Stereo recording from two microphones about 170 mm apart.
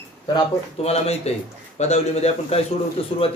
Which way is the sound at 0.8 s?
40° left (ahead or behind).